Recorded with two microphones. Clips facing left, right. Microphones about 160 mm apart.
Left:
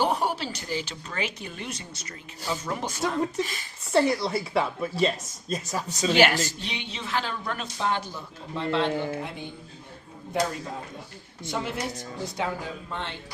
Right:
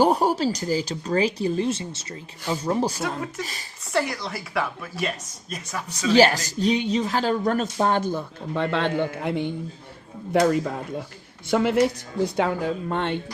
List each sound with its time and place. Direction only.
0.0 s speech: 40° right (ahead or behind)
3.9 s a woman's voice: 30° left (ahead or behind)
6.1 s a woman's voice: 35° right (ahead or behind); by 13.1 s 60° right (ahead or behind)